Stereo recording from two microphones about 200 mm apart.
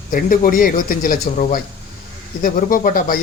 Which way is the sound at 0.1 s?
40° left (ahead or behind).